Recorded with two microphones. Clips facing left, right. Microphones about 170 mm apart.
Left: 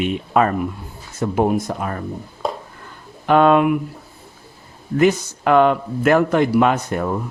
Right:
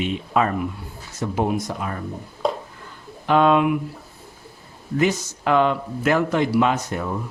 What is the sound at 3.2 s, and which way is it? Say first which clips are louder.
Speech: left 3 dB; 55° left (ahead or behind).